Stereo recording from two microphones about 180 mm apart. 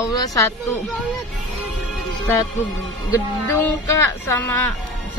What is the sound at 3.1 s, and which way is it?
Speech, 15° left (ahead or behind).